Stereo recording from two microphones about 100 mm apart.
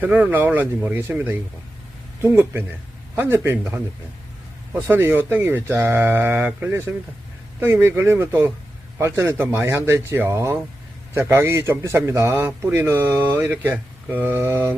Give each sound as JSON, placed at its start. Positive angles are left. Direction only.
{"t": 0.0, "sound": "a man's voice", "side_deg": -15}
{"t": 4.7, "sound": "a man's voice", "side_deg": -20}